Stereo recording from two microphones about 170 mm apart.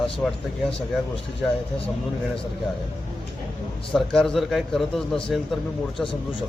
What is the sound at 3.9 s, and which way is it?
A man's voice, 5° left (ahead or behind).